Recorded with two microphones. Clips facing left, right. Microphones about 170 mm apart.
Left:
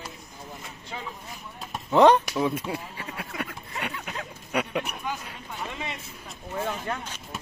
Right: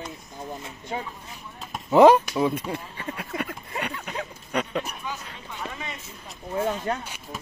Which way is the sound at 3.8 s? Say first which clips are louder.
Right 1 dB; centre (ahead or behind).